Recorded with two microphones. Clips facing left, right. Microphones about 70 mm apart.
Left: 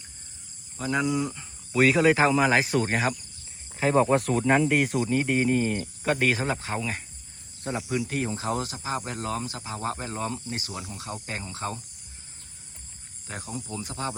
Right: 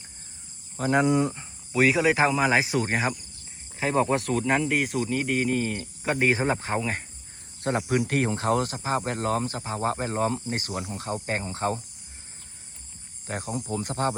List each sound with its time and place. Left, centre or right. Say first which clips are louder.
0.8 s speech: right 4 dB; right
1.7 s speech: left 1 dB; centre
6.1 s speech: right 1 dB; centre
6.3 s speech: right 3 dB; right
7.9 s speech: right 3 dB; right
13.2 s speech: right 5 dB; right